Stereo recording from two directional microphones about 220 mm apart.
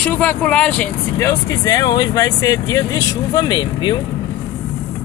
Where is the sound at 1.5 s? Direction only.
15° left (ahead or behind).